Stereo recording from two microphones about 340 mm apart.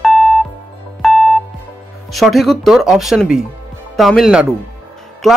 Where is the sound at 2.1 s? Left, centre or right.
Centre.